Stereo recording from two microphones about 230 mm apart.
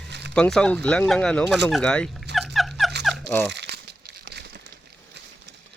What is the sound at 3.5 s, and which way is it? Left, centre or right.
Crumpling, right.